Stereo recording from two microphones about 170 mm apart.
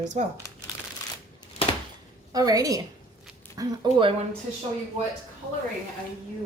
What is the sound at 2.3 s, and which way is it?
Speech, 20° right (ahead or behind).